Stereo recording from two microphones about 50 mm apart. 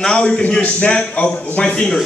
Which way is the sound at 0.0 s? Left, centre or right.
Centre.